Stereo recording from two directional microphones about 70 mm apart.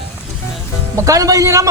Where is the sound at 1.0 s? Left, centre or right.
Right.